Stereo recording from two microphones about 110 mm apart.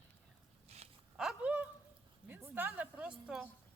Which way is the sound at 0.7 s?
70° right (ahead or behind).